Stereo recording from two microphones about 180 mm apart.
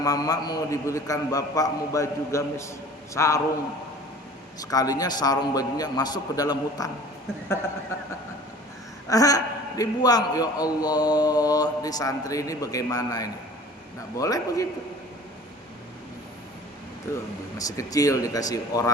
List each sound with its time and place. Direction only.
0.0 s a man's voice: 20° left (ahead or behind)
4.6 s a man's voice: 20° left (ahead or behind)
9.0 s a man's voice: 20° left (ahead or behind)
17.1 s a man's voice: 15° left (ahead or behind)